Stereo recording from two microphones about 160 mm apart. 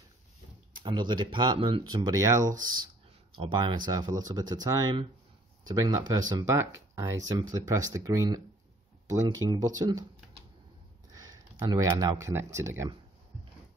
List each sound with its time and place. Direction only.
0.7 s speech: 30° right (ahead or behind)
9.5 s speech: 25° right (ahead or behind)
11.1 s a sound: 25° right (ahead or behind)
11.6 s speech: 20° right (ahead or behind)